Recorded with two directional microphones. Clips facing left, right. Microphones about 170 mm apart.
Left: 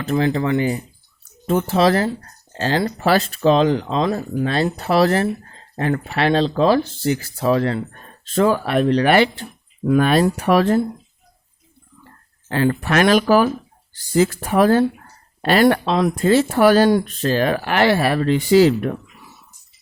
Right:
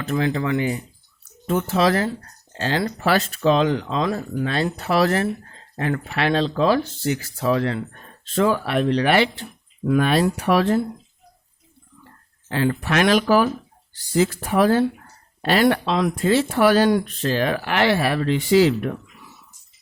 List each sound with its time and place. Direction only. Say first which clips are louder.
0.0 s speech: left 3 dB; 35° left (ahead or behind)
12.5 s speech: left 3 dB; 50° left (ahead or behind)